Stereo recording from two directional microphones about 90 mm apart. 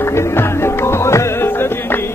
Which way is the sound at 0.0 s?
30° left (ahead or behind).